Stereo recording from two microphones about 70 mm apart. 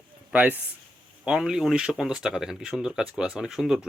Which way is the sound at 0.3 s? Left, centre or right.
Right.